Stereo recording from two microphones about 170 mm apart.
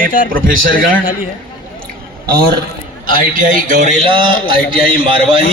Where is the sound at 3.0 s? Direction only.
55° right (ahead or behind).